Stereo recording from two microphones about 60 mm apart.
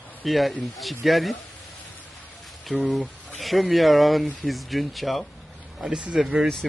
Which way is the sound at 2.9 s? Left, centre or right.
Centre.